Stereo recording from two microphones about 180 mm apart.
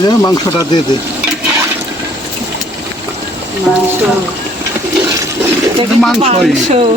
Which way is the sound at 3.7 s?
Centre (ahead or behind).